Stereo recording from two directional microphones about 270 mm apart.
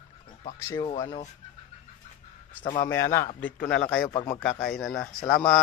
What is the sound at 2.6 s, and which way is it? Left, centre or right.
Speech, centre.